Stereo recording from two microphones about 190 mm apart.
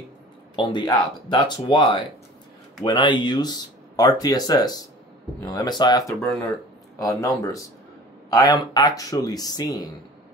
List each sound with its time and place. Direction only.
0.6 s speech: 25° left (ahead or behind)